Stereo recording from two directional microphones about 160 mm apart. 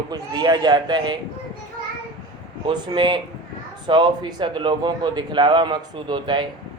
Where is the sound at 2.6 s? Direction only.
30° right (ahead or behind).